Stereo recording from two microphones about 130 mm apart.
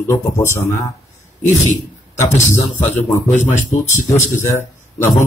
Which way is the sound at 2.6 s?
25° left (ahead or behind).